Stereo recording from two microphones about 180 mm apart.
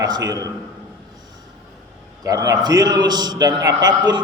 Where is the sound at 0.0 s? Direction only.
20° right (ahead or behind).